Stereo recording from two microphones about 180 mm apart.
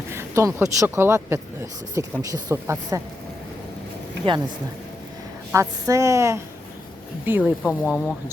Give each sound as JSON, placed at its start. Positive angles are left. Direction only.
{"t": 0.1, "sound": "a sound", "side_deg": -15}
{"t": 0.8, "sound": "speech", "side_deg": -15}
{"t": 4.2, "sound": "speech", "side_deg": -30}
{"t": 5.5, "sound": "speech", "side_deg": -15}
{"t": 7.6, "sound": "speech", "side_deg": 0}